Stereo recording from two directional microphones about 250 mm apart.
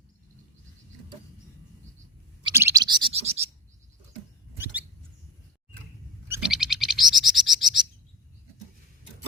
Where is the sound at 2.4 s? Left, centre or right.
Centre.